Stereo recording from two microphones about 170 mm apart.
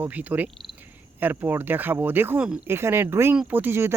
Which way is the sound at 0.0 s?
10° right (ahead or behind).